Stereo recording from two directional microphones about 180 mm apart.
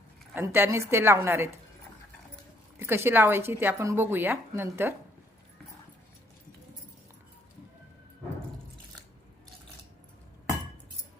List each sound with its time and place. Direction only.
0.3 s a woman's voice: 10° right (ahead or behind)
2.7 s a woman's voice: 15° right (ahead or behind)